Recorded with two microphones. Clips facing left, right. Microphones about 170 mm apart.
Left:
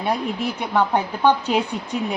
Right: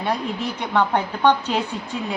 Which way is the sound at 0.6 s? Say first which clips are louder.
Even; 10° left (ahead or behind).